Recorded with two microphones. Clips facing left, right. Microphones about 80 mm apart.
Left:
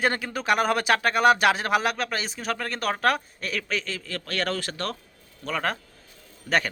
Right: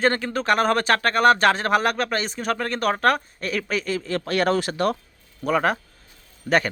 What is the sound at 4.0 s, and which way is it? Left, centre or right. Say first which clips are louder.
A man's voice: right 7 dB; right.